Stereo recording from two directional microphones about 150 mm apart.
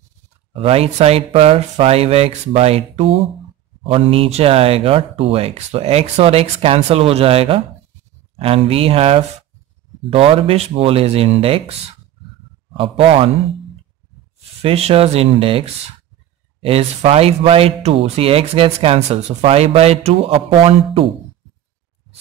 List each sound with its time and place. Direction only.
0.5 s speech: 40° right (ahead or behind)
12.7 s speech: 40° right (ahead or behind)
14.6 s speech: 40° right (ahead or behind)